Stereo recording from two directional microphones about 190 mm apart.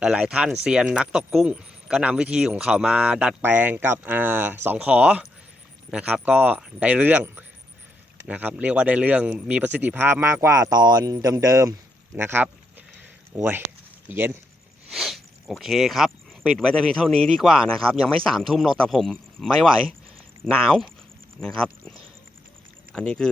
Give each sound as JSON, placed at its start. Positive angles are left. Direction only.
{"t": 0.0, "sound": "speech", "side_deg": -5}
{"t": 14.8, "sound": "a sound", "side_deg": 0}
{"t": 15.6, "sound": "speech", "side_deg": 0}